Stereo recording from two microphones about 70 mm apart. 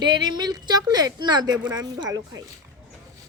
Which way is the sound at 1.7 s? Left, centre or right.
Right.